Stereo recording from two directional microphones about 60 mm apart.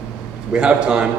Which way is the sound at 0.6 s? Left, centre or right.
Centre.